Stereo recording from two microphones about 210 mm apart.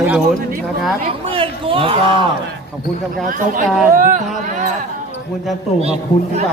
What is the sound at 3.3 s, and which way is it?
Speech, 40° right (ahead or behind).